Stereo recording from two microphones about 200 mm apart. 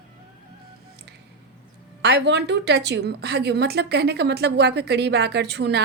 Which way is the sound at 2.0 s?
60° right (ahead or behind).